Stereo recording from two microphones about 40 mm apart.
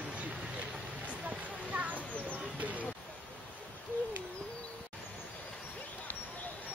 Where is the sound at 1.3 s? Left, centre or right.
Right.